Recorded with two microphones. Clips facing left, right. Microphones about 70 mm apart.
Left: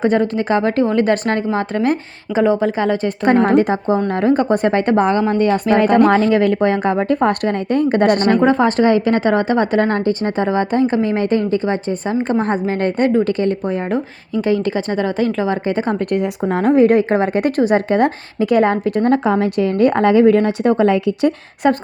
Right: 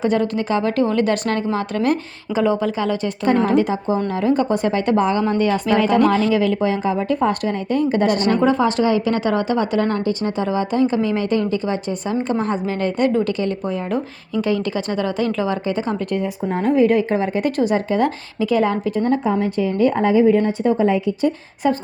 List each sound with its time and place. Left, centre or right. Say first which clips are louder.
0.0 s a woman's voice: left 3 dB; left
8.4 s a woman's voice: left 3 dB; left
16.1 s a woman's voice: left 4 dB; left
16.6 s speech: left 4 dB; left
19.1 s speech: left 4 dB; left